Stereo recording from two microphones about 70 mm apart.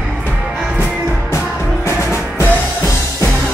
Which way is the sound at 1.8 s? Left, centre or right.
Left.